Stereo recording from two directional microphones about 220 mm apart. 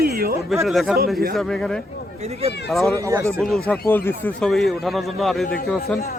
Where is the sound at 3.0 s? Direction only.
15° right (ahead or behind).